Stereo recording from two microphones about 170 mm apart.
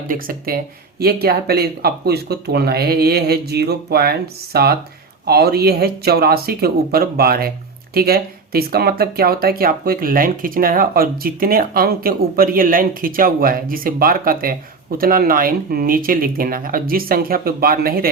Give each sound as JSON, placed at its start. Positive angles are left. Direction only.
{"t": 0.1, "sound": "speech", "side_deg": -60}